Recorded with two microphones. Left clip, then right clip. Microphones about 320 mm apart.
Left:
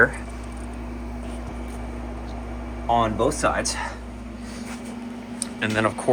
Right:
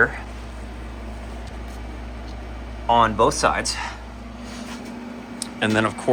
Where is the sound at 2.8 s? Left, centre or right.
Right.